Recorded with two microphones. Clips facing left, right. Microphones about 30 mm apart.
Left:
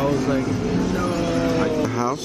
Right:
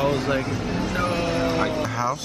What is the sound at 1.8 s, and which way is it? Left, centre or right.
Speech, centre.